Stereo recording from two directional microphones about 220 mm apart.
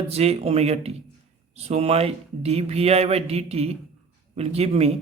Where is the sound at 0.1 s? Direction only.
30° right (ahead or behind).